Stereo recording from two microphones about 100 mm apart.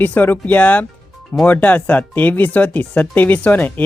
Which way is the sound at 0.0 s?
20° left (ahead or behind).